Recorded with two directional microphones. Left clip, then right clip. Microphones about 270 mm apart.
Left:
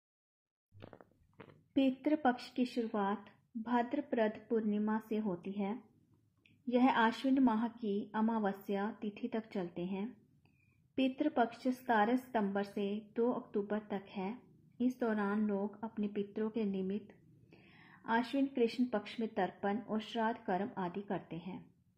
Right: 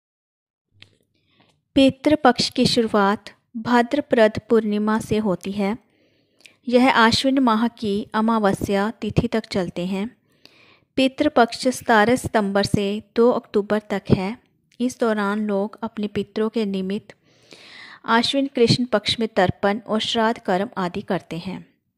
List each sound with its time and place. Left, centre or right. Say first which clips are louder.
1.7 s a woman's voice: right 17 dB; right